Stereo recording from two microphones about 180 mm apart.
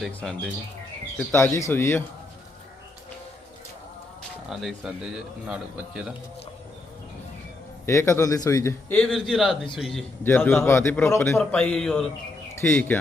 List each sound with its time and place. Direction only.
0.0 s speech: centre (ahead or behind)
1.3 s a man's voice: 15° left (ahead or behind)
4.4 s speech: centre (ahead or behind)
7.9 s a man's voice: 15° left (ahead or behind)
9.0 s speech: centre (ahead or behind)
10.2 s a man's voice: 10° left (ahead or behind)
12.5 s speech: 10° left (ahead or behind)